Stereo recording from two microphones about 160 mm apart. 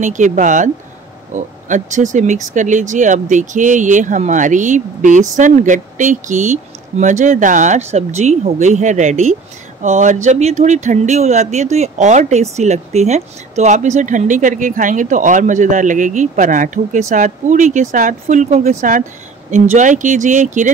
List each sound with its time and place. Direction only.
0.0 s speech: 50° right (ahead or behind)
18.8 s speech: 55° right (ahead or behind)